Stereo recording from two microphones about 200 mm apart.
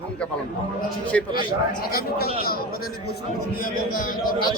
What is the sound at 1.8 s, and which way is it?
A man's voice, 50° left (ahead or behind).